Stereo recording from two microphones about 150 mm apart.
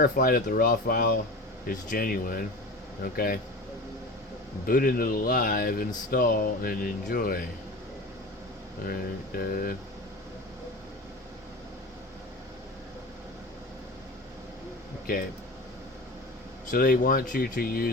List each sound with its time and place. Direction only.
0.0 s speech: 75° left (ahead or behind)
1.6 s speech: 70° left (ahead or behind)
4.6 s speech: 75° left (ahead or behind)
8.9 s speech: 75° left (ahead or behind)
16.7 s speech: 75° left (ahead or behind)